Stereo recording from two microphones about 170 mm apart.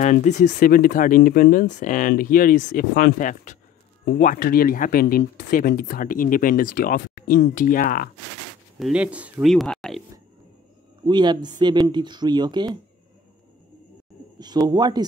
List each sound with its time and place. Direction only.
0.0 s speech: 45° left (ahead or behind)
8.7 s speech: 5° right (ahead or behind)
11.1 s speech: 25° right (ahead or behind)
14.4 s speech: 25° right (ahead or behind)